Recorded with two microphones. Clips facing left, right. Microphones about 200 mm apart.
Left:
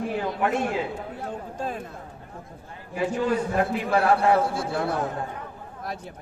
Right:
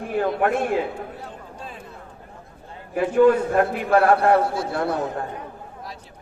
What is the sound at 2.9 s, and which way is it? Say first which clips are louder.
A man's voice: right 8 dB; 55° right (ahead or behind).